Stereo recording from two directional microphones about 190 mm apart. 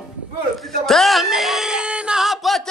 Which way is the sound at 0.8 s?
Centre (ahead or behind).